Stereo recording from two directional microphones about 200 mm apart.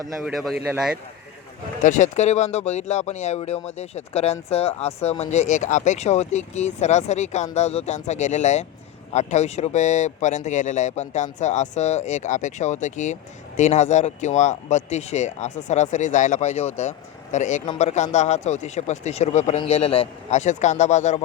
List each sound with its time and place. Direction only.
0.3 s speech: centre (ahead or behind)
1.8 s speech: 35° left (ahead or behind)